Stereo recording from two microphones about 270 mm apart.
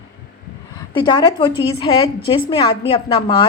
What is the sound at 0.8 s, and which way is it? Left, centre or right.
A woman's voice, centre.